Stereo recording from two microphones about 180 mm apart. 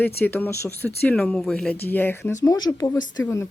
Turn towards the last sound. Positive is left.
turn(degrees=15)  # may be behind; listen again after turning